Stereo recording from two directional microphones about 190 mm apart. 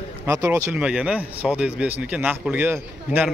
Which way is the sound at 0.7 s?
5° right (ahead or behind).